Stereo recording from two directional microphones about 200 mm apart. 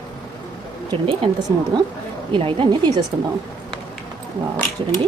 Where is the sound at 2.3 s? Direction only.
25° right (ahead or behind).